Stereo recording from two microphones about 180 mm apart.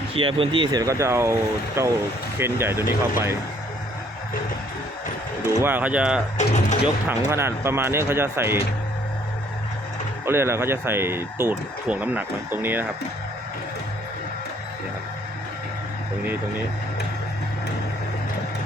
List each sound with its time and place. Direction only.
0.2 s speech: 30° right (ahead or behind); by 3.3 s 15° right (ahead or behind)
5.6 s speech: 10° right (ahead or behind)
6.3 s speech: 40° left (ahead or behind)
7.3 s speech: 15° right (ahead or behind)
10.2 s speech: 15° right (ahead or behind)